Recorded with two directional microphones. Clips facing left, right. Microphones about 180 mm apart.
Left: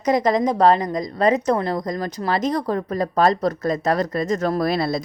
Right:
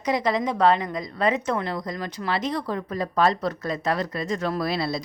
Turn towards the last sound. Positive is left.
turn(degrees=50)  # may be behind; listen again after turning